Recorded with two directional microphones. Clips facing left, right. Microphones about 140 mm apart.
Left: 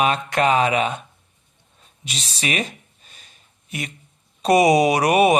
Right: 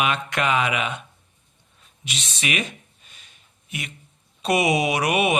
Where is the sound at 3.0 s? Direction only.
40° left (ahead or behind).